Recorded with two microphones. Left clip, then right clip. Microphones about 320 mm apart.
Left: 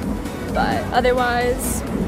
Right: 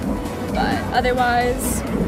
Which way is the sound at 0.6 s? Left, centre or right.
Left.